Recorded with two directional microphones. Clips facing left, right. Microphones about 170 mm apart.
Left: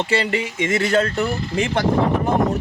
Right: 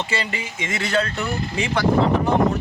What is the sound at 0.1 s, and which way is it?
Speech, 65° left (ahead or behind).